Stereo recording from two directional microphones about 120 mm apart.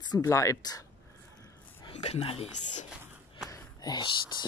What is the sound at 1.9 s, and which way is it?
Speech, 60° left (ahead or behind).